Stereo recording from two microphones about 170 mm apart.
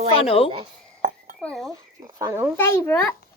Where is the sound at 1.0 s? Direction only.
55° right (ahead or behind).